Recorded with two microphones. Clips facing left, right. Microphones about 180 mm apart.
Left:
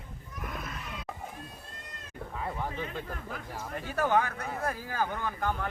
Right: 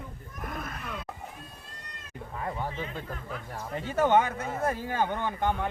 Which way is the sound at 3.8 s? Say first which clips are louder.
Right 4 dB; 20° right (ahead or behind).